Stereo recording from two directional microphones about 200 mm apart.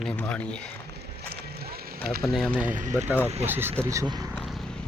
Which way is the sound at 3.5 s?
10° right (ahead or behind).